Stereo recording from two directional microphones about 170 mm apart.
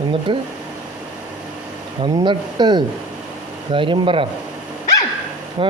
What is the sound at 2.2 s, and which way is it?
Speech, 25° right (ahead or behind).